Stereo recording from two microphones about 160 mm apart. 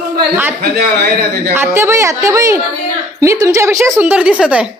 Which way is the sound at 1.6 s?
15° right (ahead or behind).